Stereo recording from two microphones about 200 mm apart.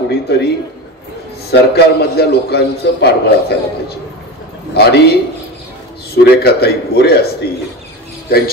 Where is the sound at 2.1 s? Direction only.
55° left (ahead or behind).